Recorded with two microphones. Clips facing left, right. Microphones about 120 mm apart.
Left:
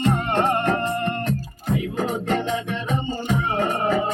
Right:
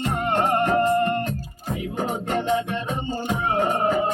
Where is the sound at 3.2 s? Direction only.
15° right (ahead or behind).